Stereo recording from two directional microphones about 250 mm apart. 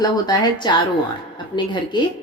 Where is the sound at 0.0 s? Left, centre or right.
Centre.